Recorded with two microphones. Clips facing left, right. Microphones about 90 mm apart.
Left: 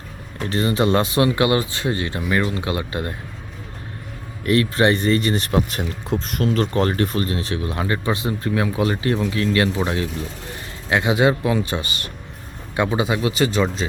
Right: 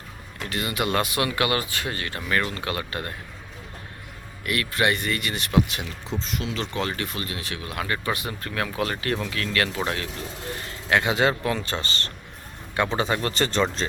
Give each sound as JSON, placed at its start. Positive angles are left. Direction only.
{"t": 0.3, "sound": "speech", "side_deg": 30}
{"t": 4.4, "sound": "speech", "side_deg": 30}